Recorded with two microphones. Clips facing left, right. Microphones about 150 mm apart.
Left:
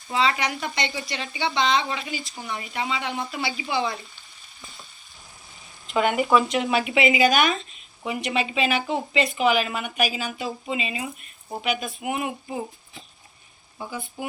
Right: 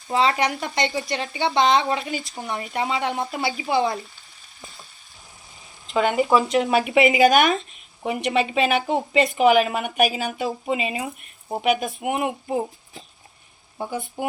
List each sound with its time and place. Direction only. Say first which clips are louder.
0.1 s speech: right 3 dB; 45° right (ahead or behind)
6.0 s speech: right 1 dB; 20° right (ahead or behind)
6.7 s speech: right 3 dB; 50° right (ahead or behind)
13.7 s speech: right 5 dB; 50° right (ahead or behind)